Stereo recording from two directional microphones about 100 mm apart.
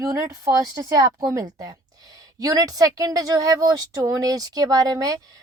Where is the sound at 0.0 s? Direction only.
30° right (ahead or behind).